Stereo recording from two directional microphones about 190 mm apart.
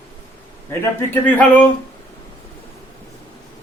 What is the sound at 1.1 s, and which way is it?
Speech, 10° left (ahead or behind).